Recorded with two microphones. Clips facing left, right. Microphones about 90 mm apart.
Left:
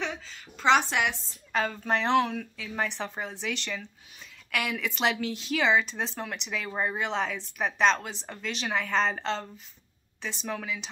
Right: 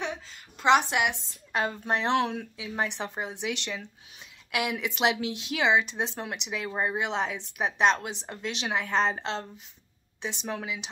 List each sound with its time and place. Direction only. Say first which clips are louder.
0.0 s a woman's voice: even; 15° right (ahead or behind)